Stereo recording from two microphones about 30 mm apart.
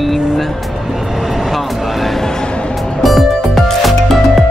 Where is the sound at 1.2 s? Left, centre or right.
Centre.